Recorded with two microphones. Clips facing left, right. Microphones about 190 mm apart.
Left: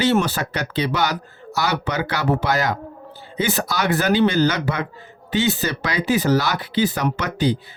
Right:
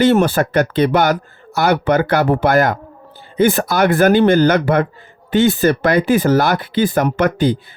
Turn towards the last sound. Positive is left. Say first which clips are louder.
# right 6 dB
turn(degrees=-50)  # may be behind; listen again after turning